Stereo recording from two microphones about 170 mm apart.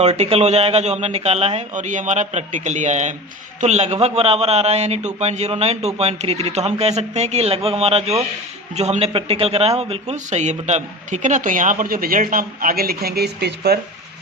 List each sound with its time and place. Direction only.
0.0 s a man's voice: 40° right (ahead or behind); by 13.7 s 70° right (ahead or behind)